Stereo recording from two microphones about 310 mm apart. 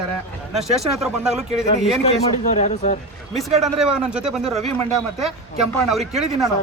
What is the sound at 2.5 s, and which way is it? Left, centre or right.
Speech, left.